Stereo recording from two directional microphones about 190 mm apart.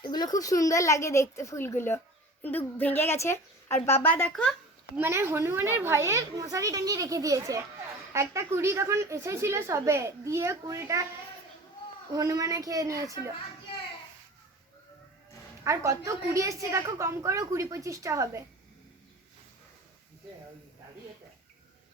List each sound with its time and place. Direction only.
0.0 s a woman's voice: 20° left (ahead or behind); by 4.5 s 5° left (ahead or behind)
4.9 s a woman's voice: 10° right (ahead or behind)
12.1 s a woman's voice: 20° right (ahead or behind)
15.6 s a woman's voice: 15° right (ahead or behind)